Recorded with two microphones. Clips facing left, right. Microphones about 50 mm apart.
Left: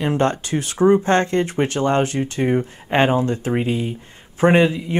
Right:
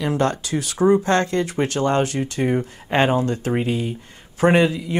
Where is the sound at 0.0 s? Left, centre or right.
Left.